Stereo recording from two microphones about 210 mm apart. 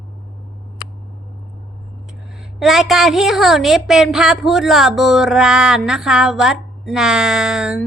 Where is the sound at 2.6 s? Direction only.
Centre (ahead or behind).